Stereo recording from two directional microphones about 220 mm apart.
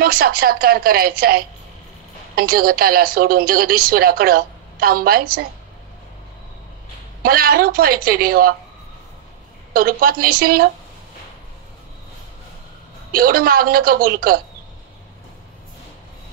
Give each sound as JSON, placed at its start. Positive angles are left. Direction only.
{"t": 0.0, "sound": "a woman's voice", "side_deg": -45}
{"t": 7.2, "sound": "a woman's voice", "side_deg": -40}
{"t": 9.8, "sound": "a woman's voice", "side_deg": -40}
{"t": 13.1, "sound": "a woman's voice", "side_deg": -45}